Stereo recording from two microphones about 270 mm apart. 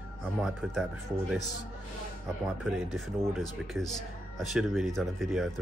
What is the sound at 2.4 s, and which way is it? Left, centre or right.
Speech, centre.